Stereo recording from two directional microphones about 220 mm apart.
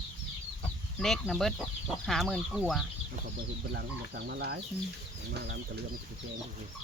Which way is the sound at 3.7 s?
50° right (ahead or behind).